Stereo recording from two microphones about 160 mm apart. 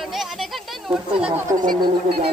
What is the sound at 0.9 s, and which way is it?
Speech, 5° right (ahead or behind).